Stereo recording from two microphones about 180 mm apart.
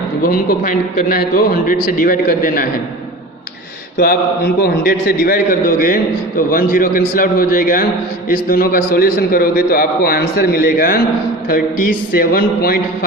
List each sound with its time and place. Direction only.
0.2 s a man's voice: 50° left (ahead or behind)
3.9 s mantra: 55° left (ahead or behind)
4.6 s a man's voice: 55° left (ahead or behind)